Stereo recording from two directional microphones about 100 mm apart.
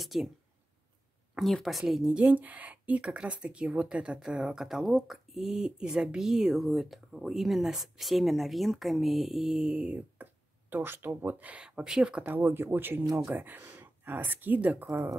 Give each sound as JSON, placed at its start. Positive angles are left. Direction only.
{"t": 0.0, "sound": "speech", "side_deg": 0}
{"t": 1.3, "sound": "speech", "side_deg": 0}
{"t": 2.2, "sound": "speech", "side_deg": -15}
{"t": 14.9, "sound": "speech", "side_deg": -30}